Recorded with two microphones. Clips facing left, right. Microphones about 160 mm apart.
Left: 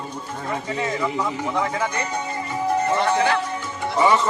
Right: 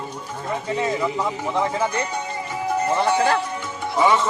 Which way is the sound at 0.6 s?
25° right (ahead or behind).